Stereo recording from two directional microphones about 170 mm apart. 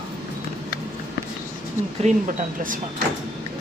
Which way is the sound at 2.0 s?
50° right (ahead or behind).